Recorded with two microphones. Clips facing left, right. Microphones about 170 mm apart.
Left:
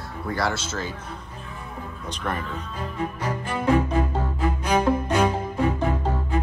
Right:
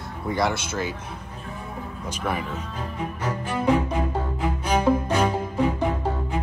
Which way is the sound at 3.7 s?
10° right (ahead or behind).